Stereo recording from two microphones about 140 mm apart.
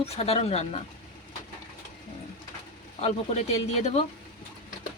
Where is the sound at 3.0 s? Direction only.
50° left (ahead or behind).